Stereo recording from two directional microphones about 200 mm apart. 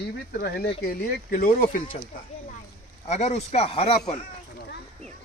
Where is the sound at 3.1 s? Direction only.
35° left (ahead or behind).